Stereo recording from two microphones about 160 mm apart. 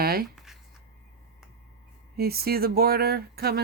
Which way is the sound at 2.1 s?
75° right (ahead or behind).